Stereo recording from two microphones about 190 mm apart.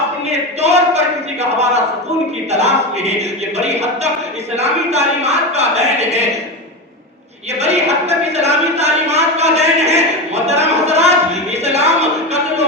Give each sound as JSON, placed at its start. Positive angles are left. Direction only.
{"t": 0.6, "sound": "speech", "side_deg": -35}
{"t": 7.6, "sound": "speech", "side_deg": -35}
{"t": 11.6, "sound": "music", "side_deg": -35}